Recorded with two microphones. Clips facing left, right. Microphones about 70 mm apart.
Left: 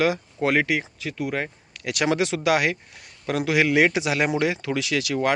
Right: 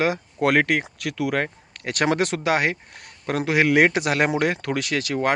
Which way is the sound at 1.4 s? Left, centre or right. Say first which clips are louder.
Even; right.